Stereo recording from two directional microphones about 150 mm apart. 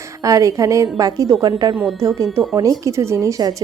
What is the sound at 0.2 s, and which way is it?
Speech, 20° right (ahead or behind).